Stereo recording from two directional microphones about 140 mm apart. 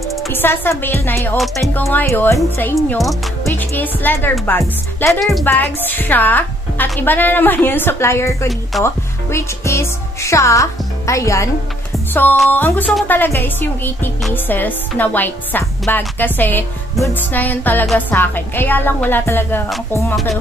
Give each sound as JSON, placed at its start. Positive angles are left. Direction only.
{"t": 0.3, "sound": "a woman's voice", "side_deg": 15}